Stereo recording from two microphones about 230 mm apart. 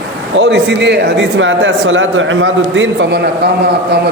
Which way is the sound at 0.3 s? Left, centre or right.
Right.